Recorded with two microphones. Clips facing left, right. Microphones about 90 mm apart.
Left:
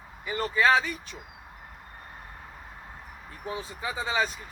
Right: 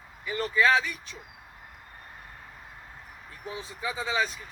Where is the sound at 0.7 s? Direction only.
20° left (ahead or behind).